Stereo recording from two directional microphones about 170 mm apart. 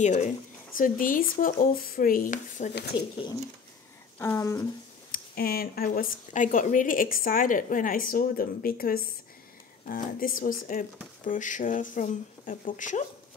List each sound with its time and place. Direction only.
0.0 s speech: 45° left (ahead or behind)
2.9 s speech: 10° right (ahead or behind)
4.2 s speech: 15° left (ahead or behind)
5.1 s speech: 60° left (ahead or behind)